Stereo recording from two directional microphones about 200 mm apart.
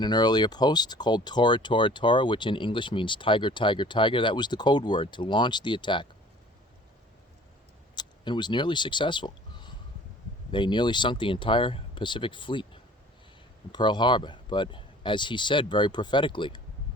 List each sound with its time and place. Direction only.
0.0 s speech: 20° left (ahead or behind)
7.9 s speech: 20° left (ahead or behind)